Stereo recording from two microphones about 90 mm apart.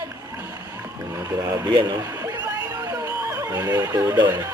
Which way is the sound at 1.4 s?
45° right (ahead or behind).